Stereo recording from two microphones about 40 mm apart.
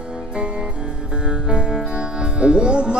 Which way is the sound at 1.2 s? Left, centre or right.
Right.